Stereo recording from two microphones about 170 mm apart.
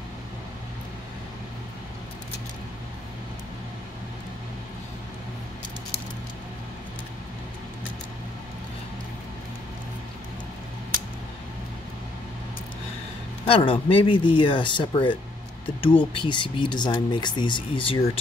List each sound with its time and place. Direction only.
13.5 s speech: 30° left (ahead or behind)